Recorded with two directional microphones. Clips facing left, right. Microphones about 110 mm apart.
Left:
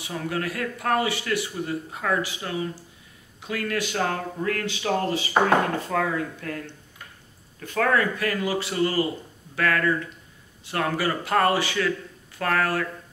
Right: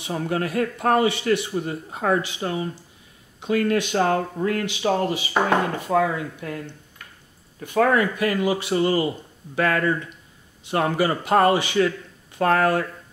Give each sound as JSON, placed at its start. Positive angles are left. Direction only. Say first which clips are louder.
{"t": 0.0, "sound": "speech", "louder": "right 4 dB", "side_deg": -30}
{"t": 7.6, "sound": "speech", "louder": "right 3 dB", "side_deg": -20}